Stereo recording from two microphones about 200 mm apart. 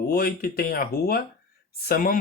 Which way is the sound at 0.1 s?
50° left (ahead or behind).